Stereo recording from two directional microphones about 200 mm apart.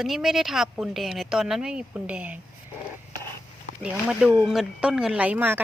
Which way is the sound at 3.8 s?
5° right (ahead or behind).